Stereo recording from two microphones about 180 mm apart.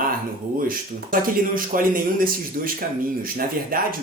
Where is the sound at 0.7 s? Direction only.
50° right (ahead or behind).